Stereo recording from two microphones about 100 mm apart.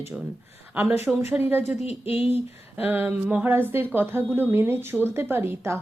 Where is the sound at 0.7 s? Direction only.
15° right (ahead or behind).